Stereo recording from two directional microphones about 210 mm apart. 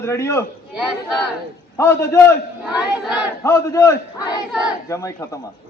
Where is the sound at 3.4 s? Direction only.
15° left (ahead or behind).